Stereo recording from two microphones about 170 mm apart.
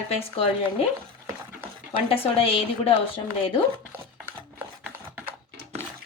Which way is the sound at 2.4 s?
35° left (ahead or behind).